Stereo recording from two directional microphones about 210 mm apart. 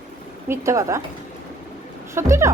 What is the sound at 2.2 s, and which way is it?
Speech, 15° right (ahead or behind).